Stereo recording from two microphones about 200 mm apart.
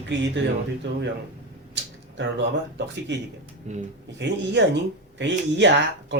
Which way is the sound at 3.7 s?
35° right (ahead or behind).